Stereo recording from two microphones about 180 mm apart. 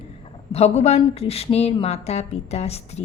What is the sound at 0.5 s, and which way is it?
Speech, 35° left (ahead or behind).